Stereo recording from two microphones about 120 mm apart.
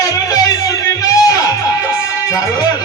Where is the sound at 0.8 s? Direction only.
30° left (ahead or behind).